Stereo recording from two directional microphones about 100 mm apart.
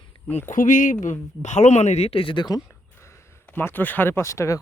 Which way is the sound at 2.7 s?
25° left (ahead or behind).